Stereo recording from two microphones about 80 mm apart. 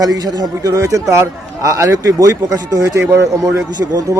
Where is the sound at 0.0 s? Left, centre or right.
Right.